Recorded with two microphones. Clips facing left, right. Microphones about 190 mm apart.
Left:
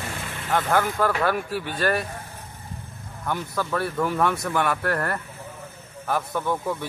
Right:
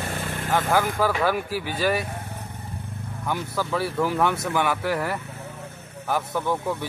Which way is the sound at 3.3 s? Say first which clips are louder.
Even; 5° right (ahead or behind).